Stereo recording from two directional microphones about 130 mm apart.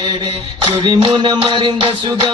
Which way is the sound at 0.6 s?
40° right (ahead or behind).